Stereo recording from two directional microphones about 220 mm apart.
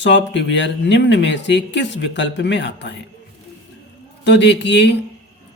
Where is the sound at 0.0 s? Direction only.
55° left (ahead or behind).